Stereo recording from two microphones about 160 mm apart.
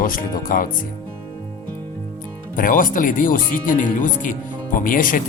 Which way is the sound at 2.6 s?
60° left (ahead or behind).